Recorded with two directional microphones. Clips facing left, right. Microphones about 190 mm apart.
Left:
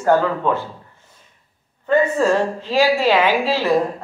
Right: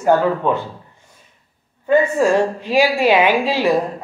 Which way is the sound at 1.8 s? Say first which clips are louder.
Right 2 dB; 15° right (ahead or behind).